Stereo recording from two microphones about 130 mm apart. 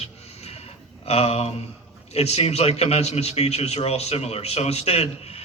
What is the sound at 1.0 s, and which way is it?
A man's voice, 50° left (ahead or behind).